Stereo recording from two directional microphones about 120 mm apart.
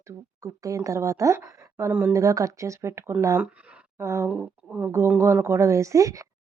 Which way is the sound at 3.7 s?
20° right (ahead or behind).